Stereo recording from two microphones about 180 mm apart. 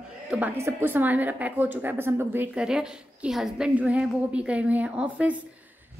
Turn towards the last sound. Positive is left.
turn(degrees=-5)  # may be behind; listen again after turning